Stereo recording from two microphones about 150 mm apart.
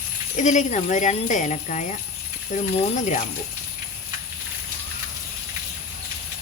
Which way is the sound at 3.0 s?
55° left (ahead or behind).